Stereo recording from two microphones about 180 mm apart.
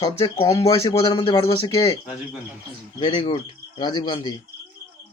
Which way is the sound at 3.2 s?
30° left (ahead or behind).